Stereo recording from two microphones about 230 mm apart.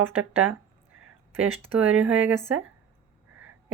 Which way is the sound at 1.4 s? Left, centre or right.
Centre.